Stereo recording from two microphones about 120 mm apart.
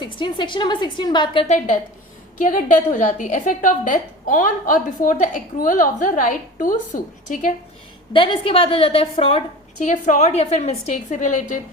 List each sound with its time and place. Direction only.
0.0 s a woman's voice: 40° left (ahead or behind)
2.4 s a woman's voice: 90° left
8.1 s a woman's voice: 45° left (ahead or behind)
9.7 s a woman's voice: 90° left